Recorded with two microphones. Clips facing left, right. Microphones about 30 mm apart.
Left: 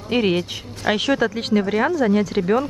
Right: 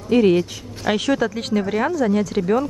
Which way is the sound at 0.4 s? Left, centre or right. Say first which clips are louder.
Right 2 dB; centre.